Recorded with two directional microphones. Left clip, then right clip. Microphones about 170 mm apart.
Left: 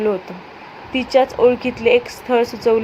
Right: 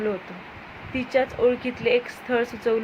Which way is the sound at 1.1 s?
20° left (ahead or behind).